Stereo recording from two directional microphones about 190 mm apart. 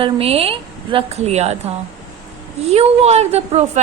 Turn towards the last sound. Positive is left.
turn(degrees=-35)  # may be behind; listen again after turning